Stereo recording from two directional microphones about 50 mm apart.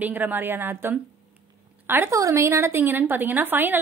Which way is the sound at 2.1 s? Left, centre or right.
Right.